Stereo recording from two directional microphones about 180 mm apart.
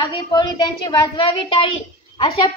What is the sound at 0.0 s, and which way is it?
A child's voice, 25° left (ahead or behind).